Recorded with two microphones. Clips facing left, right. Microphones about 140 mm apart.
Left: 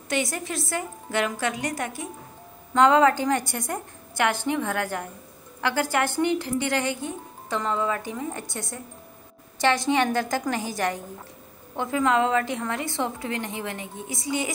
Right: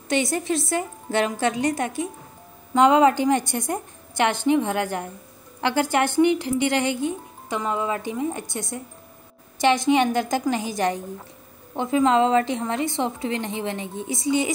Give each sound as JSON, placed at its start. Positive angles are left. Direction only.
{"t": 0.1, "sound": "a woman's voice", "side_deg": -25}